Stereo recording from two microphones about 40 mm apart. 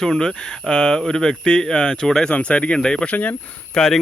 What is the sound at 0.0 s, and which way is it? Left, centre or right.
Speech, centre.